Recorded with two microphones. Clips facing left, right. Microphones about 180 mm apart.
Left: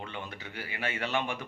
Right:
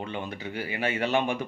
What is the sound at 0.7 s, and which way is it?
Speech, 20° right (ahead or behind).